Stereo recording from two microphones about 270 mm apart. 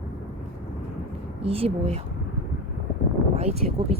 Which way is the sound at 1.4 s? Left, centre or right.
Right.